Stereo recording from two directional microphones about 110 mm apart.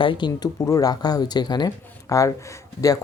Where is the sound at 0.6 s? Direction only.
30° left (ahead or behind).